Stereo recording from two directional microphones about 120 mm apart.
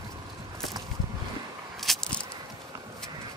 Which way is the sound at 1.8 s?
5° left (ahead or behind).